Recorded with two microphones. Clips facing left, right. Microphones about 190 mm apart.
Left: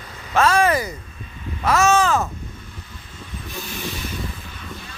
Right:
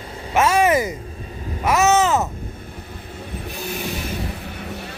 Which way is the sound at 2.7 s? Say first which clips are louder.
Right 7 dB; 60° right (ahead or behind).